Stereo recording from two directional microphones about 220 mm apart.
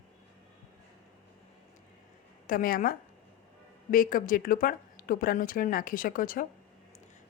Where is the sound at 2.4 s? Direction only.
40° left (ahead or behind).